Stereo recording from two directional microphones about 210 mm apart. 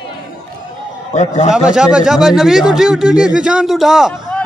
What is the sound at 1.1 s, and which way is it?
Speech, 35° left (ahead or behind).